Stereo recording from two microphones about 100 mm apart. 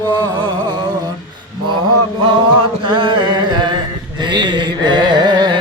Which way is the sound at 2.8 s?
55° right (ahead or behind).